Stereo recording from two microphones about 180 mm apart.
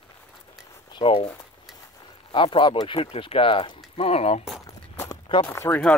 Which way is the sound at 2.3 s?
30° left (ahead or behind).